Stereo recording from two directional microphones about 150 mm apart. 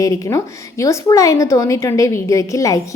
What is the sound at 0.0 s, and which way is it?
Speech, 20° left (ahead or behind).